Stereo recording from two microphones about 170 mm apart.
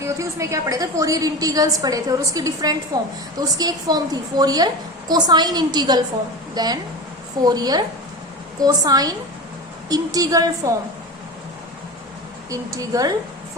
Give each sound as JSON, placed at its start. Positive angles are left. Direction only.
{"t": 0.0, "sound": "a woman's voice", "side_deg": -15}
{"t": 12.5, "sound": "a woman's voice", "side_deg": -20}